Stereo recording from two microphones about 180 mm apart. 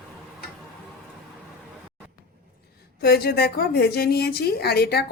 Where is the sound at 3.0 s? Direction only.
65° left (ahead or behind).